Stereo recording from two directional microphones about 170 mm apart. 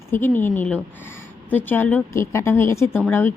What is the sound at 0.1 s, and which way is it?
A woman's voice, 15° left (ahead or behind).